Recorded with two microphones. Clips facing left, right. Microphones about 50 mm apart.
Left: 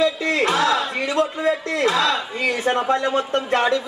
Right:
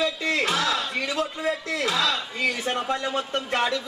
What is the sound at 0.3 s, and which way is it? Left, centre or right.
Battle cry, centre.